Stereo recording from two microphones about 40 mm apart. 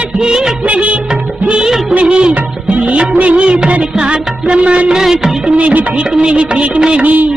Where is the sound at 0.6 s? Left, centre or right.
Right.